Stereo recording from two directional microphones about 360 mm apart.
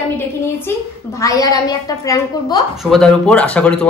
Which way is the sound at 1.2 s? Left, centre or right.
Centre.